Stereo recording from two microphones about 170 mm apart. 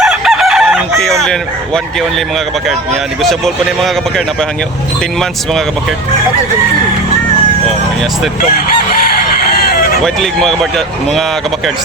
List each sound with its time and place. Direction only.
0.0 s chicken: centre (ahead or behind)
3.2 s a man's voice: centre (ahead or behind)
8.9 s chicken: 60° left (ahead or behind)
10.0 s a man's voice: centre (ahead or behind)